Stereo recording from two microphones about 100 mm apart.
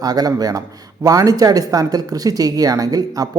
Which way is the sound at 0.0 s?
40° right (ahead or behind).